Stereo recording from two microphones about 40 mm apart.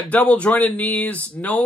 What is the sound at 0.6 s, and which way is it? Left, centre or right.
Speech, left.